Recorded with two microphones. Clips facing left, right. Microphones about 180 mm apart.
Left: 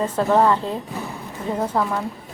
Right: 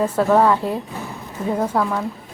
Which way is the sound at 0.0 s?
10° right (ahead or behind).